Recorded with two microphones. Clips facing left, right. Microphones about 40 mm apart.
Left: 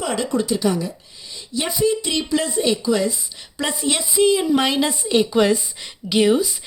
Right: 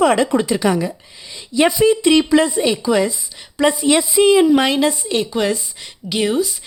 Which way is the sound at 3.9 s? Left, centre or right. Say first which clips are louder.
Right 2 dB; right.